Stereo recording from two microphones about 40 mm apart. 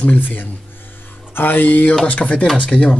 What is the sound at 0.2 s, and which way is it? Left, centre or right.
Speech, left.